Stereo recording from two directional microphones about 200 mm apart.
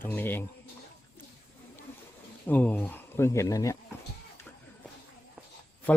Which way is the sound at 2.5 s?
5° left (ahead or behind).